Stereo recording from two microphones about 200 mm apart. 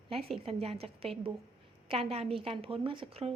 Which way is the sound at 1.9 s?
30° right (ahead or behind).